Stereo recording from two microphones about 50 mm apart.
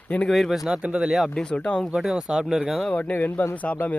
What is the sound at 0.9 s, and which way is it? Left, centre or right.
Speech, right.